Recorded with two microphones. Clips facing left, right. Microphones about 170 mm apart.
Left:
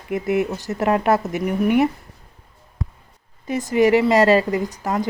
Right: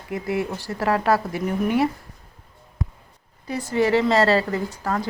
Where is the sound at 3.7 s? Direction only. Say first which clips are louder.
Left 4 dB; 15° left (ahead or behind).